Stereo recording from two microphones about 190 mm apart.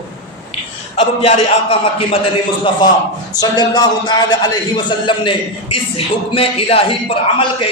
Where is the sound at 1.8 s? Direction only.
30° left (ahead or behind).